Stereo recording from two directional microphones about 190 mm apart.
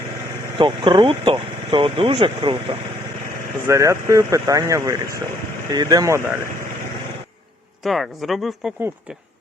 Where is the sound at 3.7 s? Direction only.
15° right (ahead or behind).